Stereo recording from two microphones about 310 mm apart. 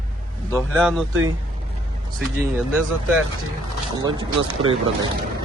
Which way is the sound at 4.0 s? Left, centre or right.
Centre.